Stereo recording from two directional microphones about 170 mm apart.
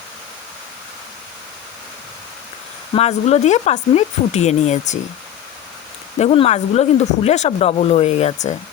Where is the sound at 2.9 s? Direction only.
40° left (ahead or behind).